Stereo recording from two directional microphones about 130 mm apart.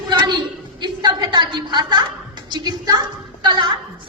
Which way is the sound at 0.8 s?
35° right (ahead or behind).